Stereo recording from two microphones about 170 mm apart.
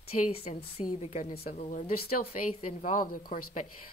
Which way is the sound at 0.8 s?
35° left (ahead or behind).